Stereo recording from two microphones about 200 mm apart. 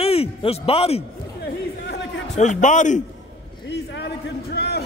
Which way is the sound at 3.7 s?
55° left (ahead or behind).